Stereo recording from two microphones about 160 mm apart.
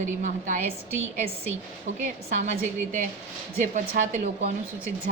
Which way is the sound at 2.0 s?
50° right (ahead or behind).